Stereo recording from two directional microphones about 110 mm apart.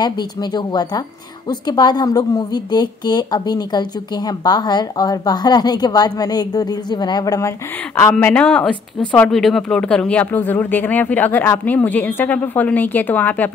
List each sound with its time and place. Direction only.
0.0 s a woman's voice: 40° left (ahead or behind)
8.1 s speech: 10° left (ahead or behind)